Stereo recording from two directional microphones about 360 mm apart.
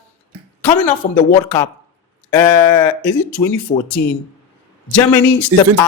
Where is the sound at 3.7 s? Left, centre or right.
Centre.